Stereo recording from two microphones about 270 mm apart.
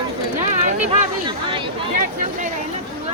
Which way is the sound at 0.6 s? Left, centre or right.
Right.